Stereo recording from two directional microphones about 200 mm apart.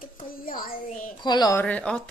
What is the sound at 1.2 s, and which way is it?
Speech, 20° left (ahead or behind).